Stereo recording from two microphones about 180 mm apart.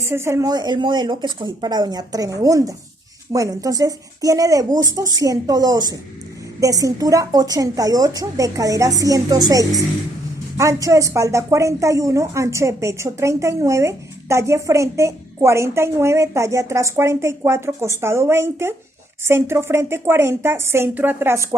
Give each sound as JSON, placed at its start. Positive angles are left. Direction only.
{"t": 0.0, "sound": "a woman's voice", "side_deg": -15}